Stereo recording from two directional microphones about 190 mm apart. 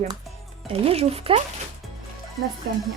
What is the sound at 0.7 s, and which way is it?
Speech, 30° right (ahead or behind).